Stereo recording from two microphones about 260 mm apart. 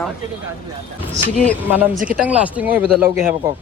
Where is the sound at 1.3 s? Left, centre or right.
Centre.